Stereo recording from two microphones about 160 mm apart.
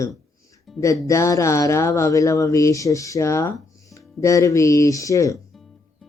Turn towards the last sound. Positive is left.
turn(degrees=20)  # may be behind; listen again after turning